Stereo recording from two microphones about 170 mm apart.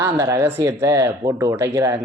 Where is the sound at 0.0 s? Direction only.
15° right (ahead or behind).